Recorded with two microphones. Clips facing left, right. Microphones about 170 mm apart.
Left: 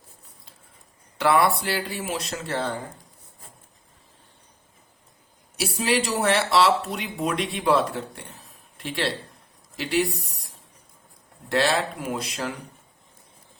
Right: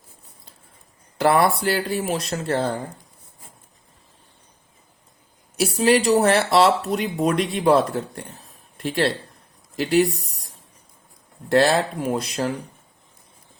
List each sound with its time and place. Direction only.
1.2 s speech: 40° right (ahead or behind)
5.5 s speech: 45° right (ahead or behind)
11.4 s speech: 45° right (ahead or behind)